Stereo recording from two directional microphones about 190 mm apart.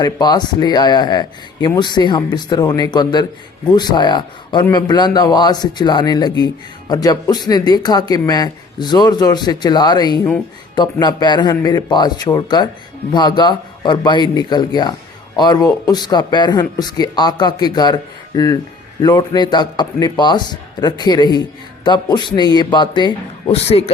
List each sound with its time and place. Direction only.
0.0 s a man's voice: 20° left (ahead or behind)